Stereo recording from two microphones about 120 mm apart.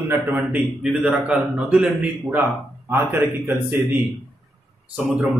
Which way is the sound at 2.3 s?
20° right (ahead or behind).